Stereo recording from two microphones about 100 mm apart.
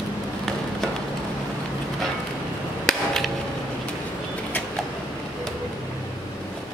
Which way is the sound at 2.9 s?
5° left (ahead or behind).